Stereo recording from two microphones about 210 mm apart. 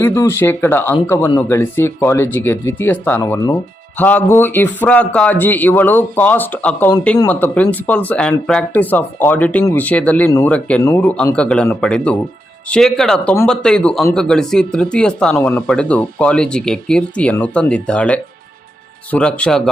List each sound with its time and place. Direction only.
0.0 s speech: 10° left (ahead or behind)